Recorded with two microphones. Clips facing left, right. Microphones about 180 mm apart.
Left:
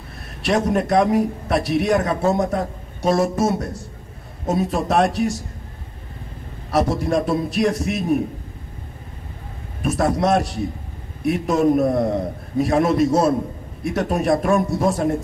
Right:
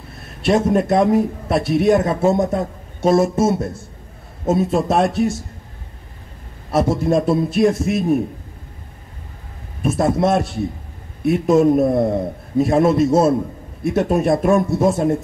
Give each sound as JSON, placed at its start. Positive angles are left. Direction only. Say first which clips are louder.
{"t": 0.5, "sound": "a man's voice", "louder": "right 3 dB", "side_deg": -25}
{"t": 6.7, "sound": "a man's voice", "louder": "right 3 dB", "side_deg": -25}
{"t": 9.8, "sound": "a man's voice", "louder": "right 2 dB", "side_deg": -25}
{"t": 11.7, "sound": "a man's voice", "louder": "right 2 dB", "side_deg": -25}